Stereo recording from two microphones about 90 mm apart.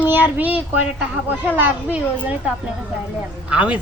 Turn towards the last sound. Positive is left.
turn(degrees=-15)  # may be behind; listen again after turning